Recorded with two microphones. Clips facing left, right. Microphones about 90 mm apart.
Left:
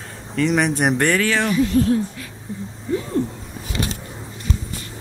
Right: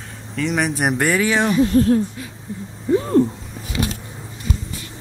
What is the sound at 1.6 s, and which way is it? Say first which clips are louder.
Speech: right 3 dB; 40° right (ahead or behind).